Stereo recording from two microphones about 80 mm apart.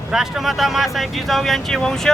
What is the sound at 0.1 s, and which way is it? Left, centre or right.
Speech, centre.